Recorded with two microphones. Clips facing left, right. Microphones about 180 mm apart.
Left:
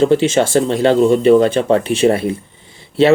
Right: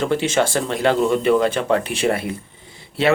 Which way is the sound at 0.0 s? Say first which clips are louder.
Left 7 dB; 20° left (ahead or behind).